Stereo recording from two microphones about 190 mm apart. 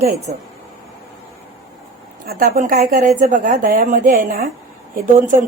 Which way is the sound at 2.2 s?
45° right (ahead or behind).